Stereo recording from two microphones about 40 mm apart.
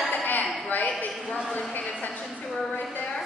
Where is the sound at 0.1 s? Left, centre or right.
Left.